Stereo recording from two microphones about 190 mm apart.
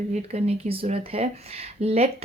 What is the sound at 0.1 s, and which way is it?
Speech, 35° right (ahead or behind).